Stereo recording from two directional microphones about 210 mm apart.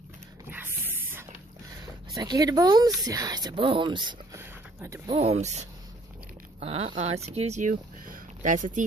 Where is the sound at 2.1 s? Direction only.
20° right (ahead or behind).